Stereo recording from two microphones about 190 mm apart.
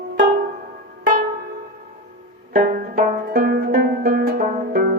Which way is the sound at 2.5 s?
50° right (ahead or behind).